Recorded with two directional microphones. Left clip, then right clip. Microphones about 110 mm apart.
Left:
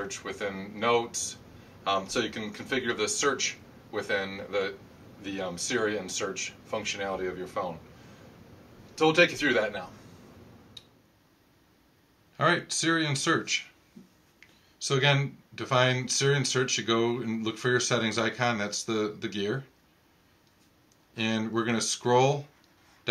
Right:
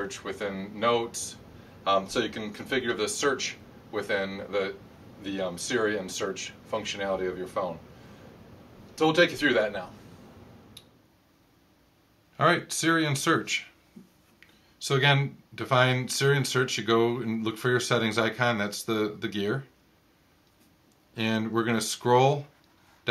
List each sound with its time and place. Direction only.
0.0 s speech: centre (ahead or behind)
8.9 s speech: centre (ahead or behind)
12.4 s speech: 35° right (ahead or behind)
14.8 s speech: 35° right (ahead or behind)
21.1 s speech: 30° right (ahead or behind)